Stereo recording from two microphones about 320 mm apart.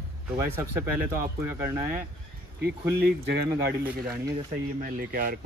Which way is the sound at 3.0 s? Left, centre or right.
Right.